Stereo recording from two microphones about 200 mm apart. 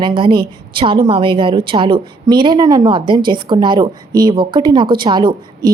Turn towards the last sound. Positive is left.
turn(degrees=-20)  # may be behind; listen again after turning